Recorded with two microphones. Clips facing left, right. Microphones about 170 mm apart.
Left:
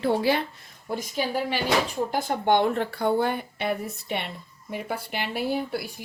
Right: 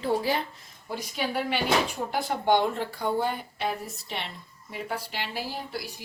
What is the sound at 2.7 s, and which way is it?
A woman's voice, 65° left (ahead or behind).